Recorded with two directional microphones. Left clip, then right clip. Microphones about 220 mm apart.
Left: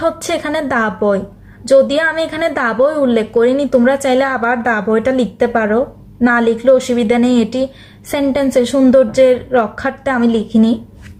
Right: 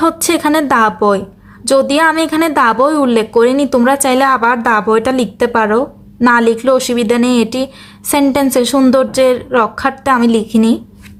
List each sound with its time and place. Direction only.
0.0 s a woman's voice: 45° right (ahead or behind)